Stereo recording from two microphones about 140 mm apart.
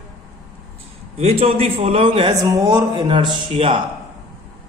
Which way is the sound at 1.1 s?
45° right (ahead or behind).